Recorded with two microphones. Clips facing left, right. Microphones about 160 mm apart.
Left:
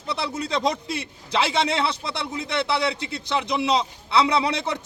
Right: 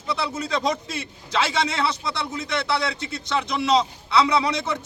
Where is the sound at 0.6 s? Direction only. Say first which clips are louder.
Left 1 dB; 15° left (ahead or behind).